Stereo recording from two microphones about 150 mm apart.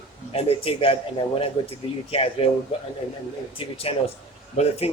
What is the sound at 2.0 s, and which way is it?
Speech, 40° left (ahead or behind).